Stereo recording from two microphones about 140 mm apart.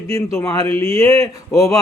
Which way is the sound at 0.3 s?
20° left (ahead or behind).